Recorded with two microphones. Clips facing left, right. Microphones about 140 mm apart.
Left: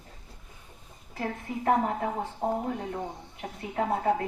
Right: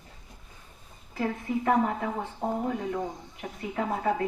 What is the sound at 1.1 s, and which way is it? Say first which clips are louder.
Speech: right 4 dB; 45° left (ahead or behind).